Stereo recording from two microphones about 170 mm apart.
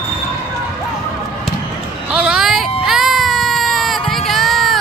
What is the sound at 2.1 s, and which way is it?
Vehicle, 5° right (ahead or behind).